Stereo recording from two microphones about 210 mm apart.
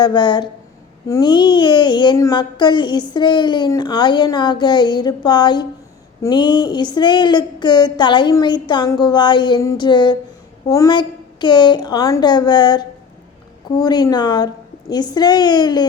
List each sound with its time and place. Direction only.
0.0 s speech: 20° left (ahead or behind)